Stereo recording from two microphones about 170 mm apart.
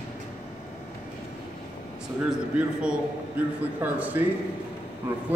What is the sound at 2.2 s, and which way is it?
A man's voice, 5° right (ahead or behind).